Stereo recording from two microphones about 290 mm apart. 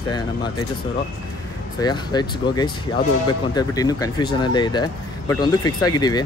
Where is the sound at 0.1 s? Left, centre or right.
Centre.